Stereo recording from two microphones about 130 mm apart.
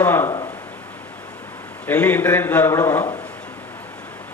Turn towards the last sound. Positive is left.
turn(degrees=20)  # may be behind; listen again after turning